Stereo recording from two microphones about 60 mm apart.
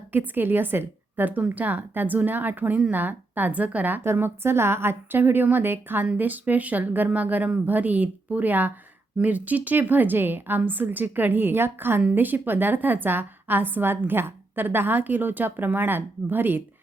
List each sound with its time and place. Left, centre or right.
0.1 s a woman's voice: right
4.0 s a woman's voice: right